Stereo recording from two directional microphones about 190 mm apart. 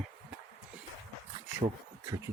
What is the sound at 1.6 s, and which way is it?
Speech, 25° right (ahead or behind).